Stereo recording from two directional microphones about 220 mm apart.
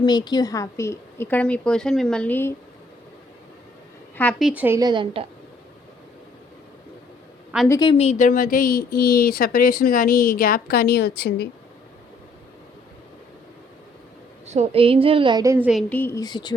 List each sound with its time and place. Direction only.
0.0 s a woman's voice: 20° left (ahead or behind)
4.2 s a woman's voice: centre (ahead or behind); by 5.2 s 20° right (ahead or behind)
7.7 s speech: 20° left (ahead or behind); by 11.4 s 50° left (ahead or behind)
14.4 s a woman's voice: 30° right (ahead or behind); by 15.8 s 5° right (ahead or behind)
15.9 s a woman's voice: 10° left (ahead or behind)